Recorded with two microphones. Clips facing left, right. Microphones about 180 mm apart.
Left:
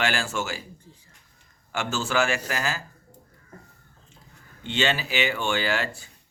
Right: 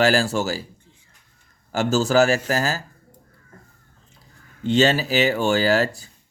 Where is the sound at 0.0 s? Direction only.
40° right (ahead or behind).